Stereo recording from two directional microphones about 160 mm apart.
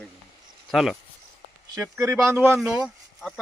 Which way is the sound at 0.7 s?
Centre (ahead or behind).